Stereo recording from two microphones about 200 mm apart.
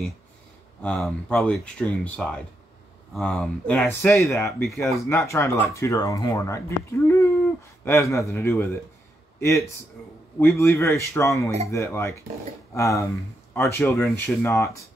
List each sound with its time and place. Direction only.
0.8 s speech: 5° left (ahead or behind)